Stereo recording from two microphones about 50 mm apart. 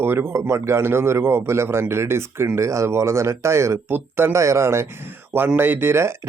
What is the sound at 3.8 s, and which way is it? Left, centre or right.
Speech, right.